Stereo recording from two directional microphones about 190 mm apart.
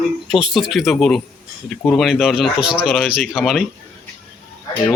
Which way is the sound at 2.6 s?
30° left (ahead or behind).